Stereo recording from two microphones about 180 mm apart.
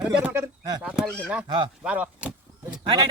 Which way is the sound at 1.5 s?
25° right (ahead or behind).